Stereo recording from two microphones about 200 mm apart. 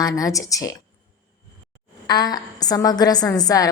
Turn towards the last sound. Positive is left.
turn(degrees=20)  # may be behind; listen again after turning